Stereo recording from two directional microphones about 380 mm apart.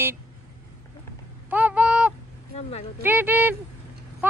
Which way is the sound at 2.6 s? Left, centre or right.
Centre.